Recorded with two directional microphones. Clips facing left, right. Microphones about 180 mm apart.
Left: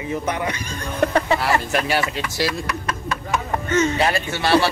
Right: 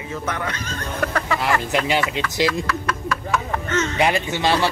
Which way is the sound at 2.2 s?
20° left (ahead or behind).